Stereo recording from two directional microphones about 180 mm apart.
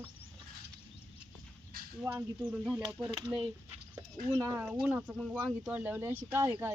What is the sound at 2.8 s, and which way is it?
Speech, 25° right (ahead or behind).